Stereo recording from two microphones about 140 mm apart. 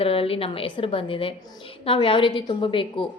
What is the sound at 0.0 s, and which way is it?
A woman's voice, 40° left (ahead or behind).